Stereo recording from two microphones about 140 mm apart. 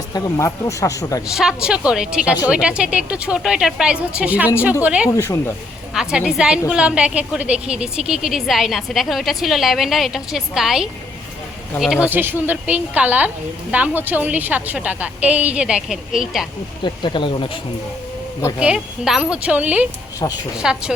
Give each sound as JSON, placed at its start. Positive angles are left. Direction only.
{"t": 0.1, "sound": "speech", "side_deg": 20}
{"t": 1.3, "sound": "a woman's voice", "side_deg": -5}
{"t": 5.1, "sound": "speech", "side_deg": 20}
{"t": 5.9, "sound": "a woman's voice", "side_deg": -5}
{"t": 16.8, "sound": "speech", "side_deg": 35}
{"t": 18.6, "sound": "a woman's voice", "side_deg": -5}
{"t": 20.1, "sound": "speech", "side_deg": 25}
{"t": 20.6, "sound": "a woman's voice", "side_deg": -5}